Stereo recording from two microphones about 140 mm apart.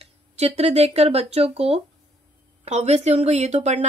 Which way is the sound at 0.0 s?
45° right (ahead or behind).